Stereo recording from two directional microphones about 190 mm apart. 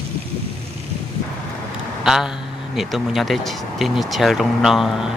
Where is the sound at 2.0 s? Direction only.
5° right (ahead or behind).